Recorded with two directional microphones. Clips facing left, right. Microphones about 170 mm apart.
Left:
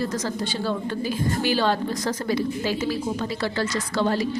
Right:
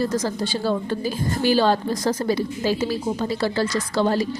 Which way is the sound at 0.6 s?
35° right (ahead or behind).